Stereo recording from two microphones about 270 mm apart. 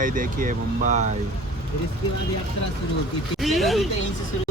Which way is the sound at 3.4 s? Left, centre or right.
Centre.